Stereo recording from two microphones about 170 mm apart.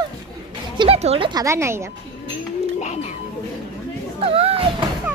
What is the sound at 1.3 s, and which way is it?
Speech, 20° right (ahead or behind).